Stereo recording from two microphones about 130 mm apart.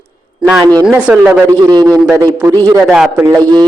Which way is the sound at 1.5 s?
30° right (ahead or behind).